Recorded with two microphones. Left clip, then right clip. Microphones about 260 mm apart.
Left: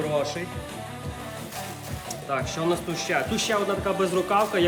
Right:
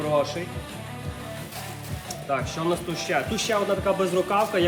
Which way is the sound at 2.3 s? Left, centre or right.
Centre.